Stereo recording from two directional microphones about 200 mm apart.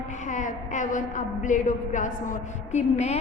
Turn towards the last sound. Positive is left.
turn(degrees=35)  # may be behind; listen again after turning